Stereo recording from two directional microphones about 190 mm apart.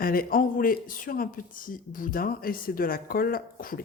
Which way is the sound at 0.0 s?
50° left (ahead or behind).